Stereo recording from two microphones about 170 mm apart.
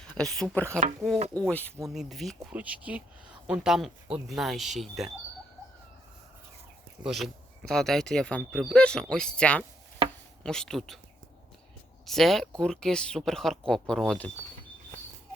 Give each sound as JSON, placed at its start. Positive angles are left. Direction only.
{"t": 0.2, "sound": "speech", "side_deg": 5}
{"t": 7.0, "sound": "speech", "side_deg": 0}
{"t": 12.0, "sound": "speech", "side_deg": 0}